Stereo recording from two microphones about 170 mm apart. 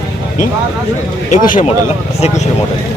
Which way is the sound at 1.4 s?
45° left (ahead or behind).